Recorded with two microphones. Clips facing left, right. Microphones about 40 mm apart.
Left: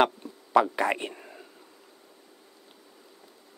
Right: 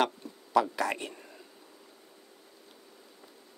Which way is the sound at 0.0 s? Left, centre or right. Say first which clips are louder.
Left 5 dB; left.